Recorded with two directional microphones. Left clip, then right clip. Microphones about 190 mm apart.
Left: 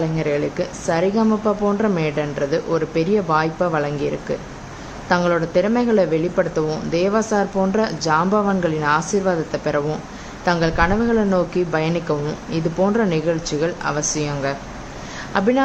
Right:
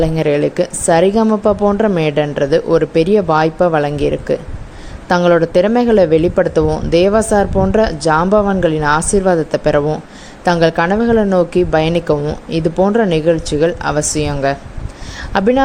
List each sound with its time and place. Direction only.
0.0 s speech: 40° right (ahead or behind)